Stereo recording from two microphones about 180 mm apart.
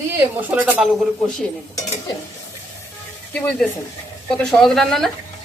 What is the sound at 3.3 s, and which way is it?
A man's voice, 5° left (ahead or behind).